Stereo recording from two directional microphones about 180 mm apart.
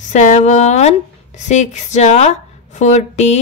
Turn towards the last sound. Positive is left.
turn(degrees=40)  # may be behind; listen again after turning